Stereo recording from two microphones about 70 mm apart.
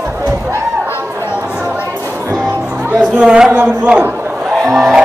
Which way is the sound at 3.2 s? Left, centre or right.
Centre.